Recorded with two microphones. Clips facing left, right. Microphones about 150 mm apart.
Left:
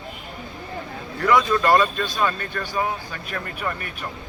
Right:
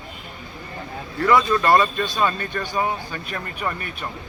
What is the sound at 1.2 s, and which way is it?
Speech, centre (ahead or behind).